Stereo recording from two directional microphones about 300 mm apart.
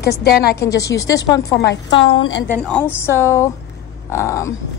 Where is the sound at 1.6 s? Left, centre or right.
Left.